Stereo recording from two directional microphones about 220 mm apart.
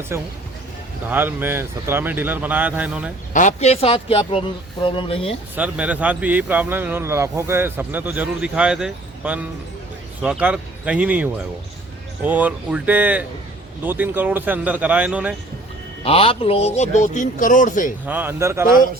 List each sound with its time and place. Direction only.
0.1 s speech: 10° right (ahead or behind)
3.3 s speech: 30° left (ahead or behind)
5.5 s speech: 5° right (ahead or behind)
16.0 s a man's voice: 25° left (ahead or behind)
18.0 s speech: 10° right (ahead or behind)